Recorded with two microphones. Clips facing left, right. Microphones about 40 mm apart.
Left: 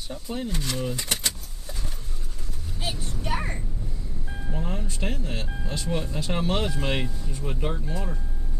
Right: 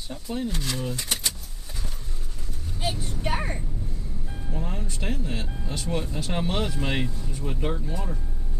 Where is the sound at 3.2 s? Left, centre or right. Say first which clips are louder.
Right 1 dB; right.